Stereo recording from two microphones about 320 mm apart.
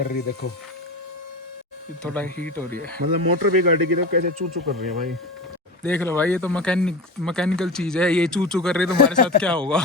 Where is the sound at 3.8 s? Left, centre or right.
Right.